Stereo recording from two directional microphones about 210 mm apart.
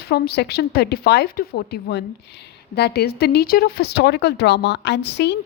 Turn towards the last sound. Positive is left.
turn(degrees=55)  # may be behind; listen again after turning